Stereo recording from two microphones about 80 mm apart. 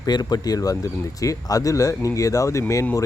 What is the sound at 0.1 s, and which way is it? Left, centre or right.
Speech, left.